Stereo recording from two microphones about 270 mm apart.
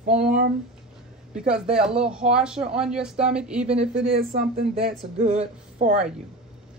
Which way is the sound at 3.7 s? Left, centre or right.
Right.